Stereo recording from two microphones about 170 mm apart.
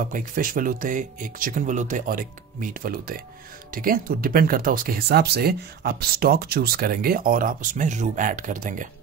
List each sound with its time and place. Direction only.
0.0 s speech: 55° right (ahead or behind)